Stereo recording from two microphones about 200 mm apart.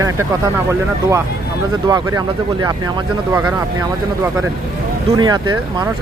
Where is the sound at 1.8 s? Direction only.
20° right (ahead or behind).